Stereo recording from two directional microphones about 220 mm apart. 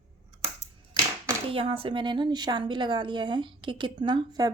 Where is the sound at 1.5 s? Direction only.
25° right (ahead or behind).